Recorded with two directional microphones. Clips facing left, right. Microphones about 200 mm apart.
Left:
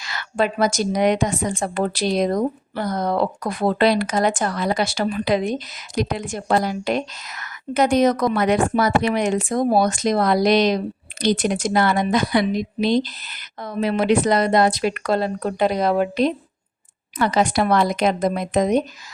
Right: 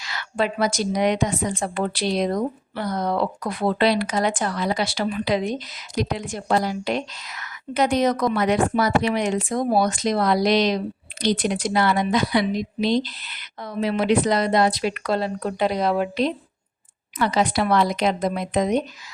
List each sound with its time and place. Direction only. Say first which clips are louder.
0.0 s a woman's voice: left 2 dB; 50° left (ahead or behind)